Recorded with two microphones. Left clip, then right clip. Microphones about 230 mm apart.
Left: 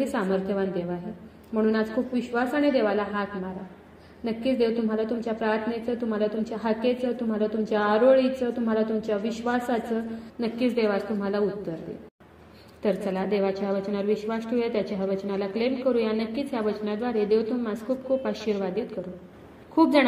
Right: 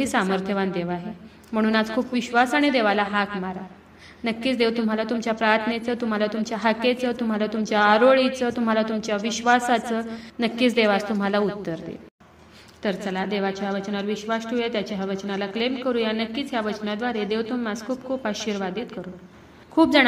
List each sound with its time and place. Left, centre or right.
0.0 s a woman's voice: right
12.8 s a woman's voice: centre